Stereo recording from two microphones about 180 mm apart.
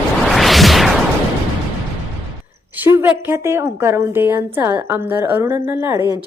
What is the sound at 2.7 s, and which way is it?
A woman's voice, 10° right (ahead or behind).